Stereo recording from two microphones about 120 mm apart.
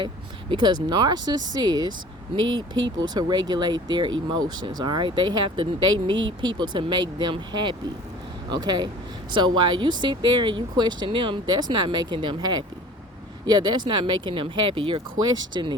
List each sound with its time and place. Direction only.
0.5 s speech: 40° right (ahead or behind)